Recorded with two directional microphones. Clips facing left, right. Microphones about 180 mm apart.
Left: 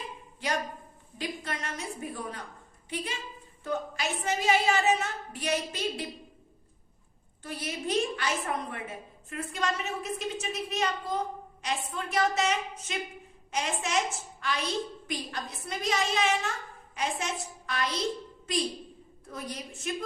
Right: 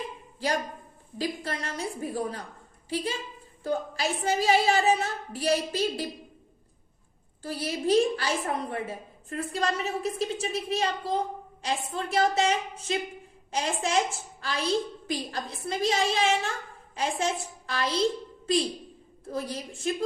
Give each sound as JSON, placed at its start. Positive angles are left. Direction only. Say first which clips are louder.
{"t": 1.2, "sound": "a woman's voice", "louder": "right 4 dB", "side_deg": -35}
{"t": 7.4, "sound": "a woman's voice", "louder": "right 6 dB", "side_deg": -35}
{"t": 19.2, "sound": "a woman's voice", "louder": "right 6 dB", "side_deg": -30}